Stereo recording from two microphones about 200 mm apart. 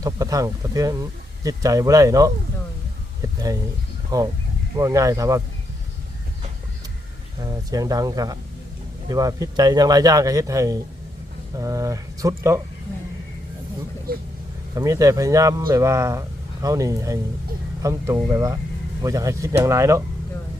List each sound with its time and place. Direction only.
0.0 s speech: 15° right (ahead or behind)
7.4 s speech: 20° right (ahead or behind)
14.1 s speech: 50° right (ahead or behind)
14.8 s speech: 15° right (ahead or behind)